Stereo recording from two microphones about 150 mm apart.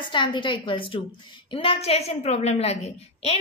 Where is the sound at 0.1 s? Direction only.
30° left (ahead or behind).